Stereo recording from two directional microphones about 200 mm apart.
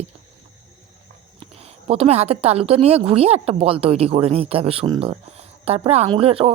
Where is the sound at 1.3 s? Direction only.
30° right (ahead or behind).